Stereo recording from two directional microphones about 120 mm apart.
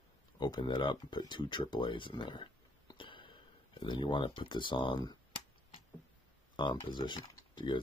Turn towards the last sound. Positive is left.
turn(degrees=40)  # may be behind; listen again after turning